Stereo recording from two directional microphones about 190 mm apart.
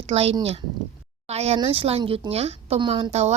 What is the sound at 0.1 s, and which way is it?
Speech, 30° right (ahead or behind).